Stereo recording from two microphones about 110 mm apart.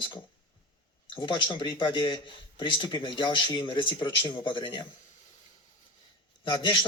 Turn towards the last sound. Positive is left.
turn(degrees=50)  # may be behind; listen again after turning